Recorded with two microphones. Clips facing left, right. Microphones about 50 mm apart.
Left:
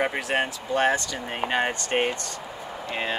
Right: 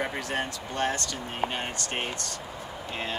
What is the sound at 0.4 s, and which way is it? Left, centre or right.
Speech, left.